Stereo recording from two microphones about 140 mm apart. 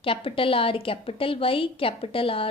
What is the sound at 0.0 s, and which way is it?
A woman's voice, 40° left (ahead or behind).